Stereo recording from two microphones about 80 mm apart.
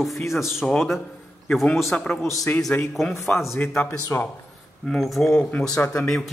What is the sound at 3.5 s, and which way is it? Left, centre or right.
Speech, left.